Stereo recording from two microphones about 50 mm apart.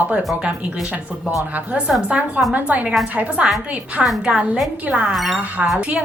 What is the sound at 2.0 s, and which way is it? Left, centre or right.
A woman's voice, right.